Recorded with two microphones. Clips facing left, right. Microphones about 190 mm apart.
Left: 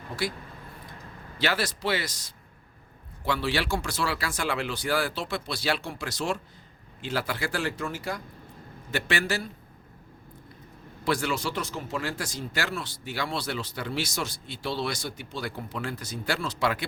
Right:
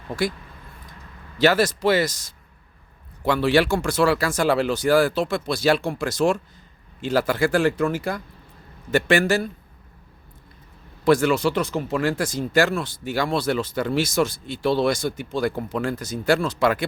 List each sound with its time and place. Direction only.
1.4 s speech: 45° right (ahead or behind)
11.0 s speech: 50° right (ahead or behind)